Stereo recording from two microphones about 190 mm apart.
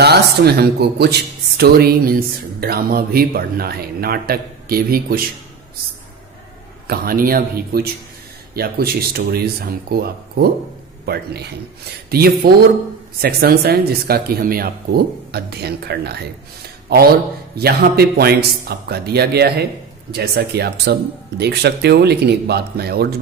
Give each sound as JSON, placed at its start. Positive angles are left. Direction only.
{"t": 0.0, "sound": "speech", "side_deg": -60}
{"t": 6.9, "sound": "speech", "side_deg": -50}
{"t": 17.6, "sound": "speech", "side_deg": -55}